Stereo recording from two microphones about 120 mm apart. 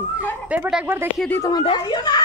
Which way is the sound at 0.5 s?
15° right (ahead or behind).